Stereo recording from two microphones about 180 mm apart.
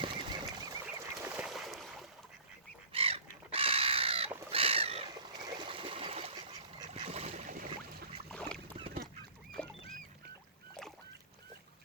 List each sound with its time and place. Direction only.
0.0 s bird flight: 25° right (ahead or behind)
0.9 s bird: 10° right (ahead or behind)
1.5 s a sound: centre (ahead or behind)
2.9 s goose: 30° right (ahead or behind)
3.5 s crow: 30° right (ahead or behind)
4.3 s crow: 15° right (ahead or behind)
4.5 s bird: 30° right (ahead or behind)
5.5 s a sound: 25° right (ahead or behind)
6.9 s boat: 35° right (ahead or behind)
8.3 s duck: 5° left (ahead or behind)
9.6 s rodents: 5° left (ahead or behind)